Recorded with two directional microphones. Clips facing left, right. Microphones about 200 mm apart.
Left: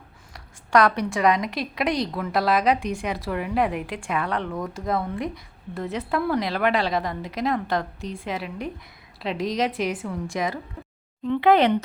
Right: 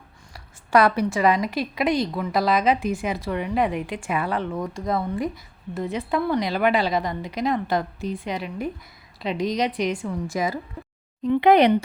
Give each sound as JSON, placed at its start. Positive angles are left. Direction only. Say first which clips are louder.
{"t": 0.3, "sound": "a woman's voice", "louder": "right 1 dB", "side_deg": -5}
{"t": 11.2, "sound": "speech", "louder": "right 2 dB", "side_deg": -15}